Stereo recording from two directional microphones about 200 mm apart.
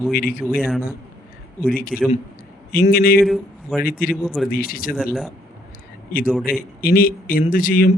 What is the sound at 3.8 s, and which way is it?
Speech, 45° left (ahead or behind).